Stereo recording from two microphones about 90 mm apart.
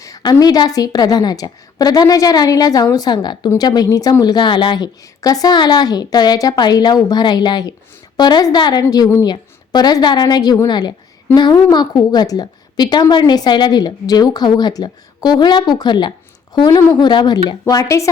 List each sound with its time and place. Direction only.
0.0 s a woman's voice: 45° left (ahead or behind)
17.7 s a woman's voice: 40° left (ahead or behind)